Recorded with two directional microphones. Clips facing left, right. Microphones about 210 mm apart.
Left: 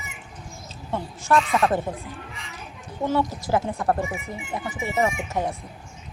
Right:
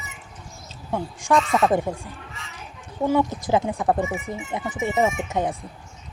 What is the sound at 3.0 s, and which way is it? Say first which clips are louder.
Speech: right 3 dB; 15° right (ahead or behind).